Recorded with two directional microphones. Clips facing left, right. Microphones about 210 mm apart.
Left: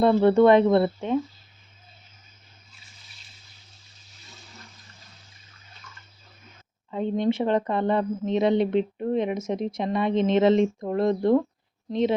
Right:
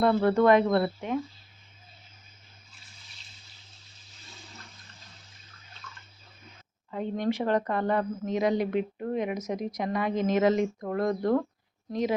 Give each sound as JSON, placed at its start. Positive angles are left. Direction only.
{"t": 0.0, "sound": "speech", "side_deg": 25}
{"t": 6.9, "sound": "speech", "side_deg": 20}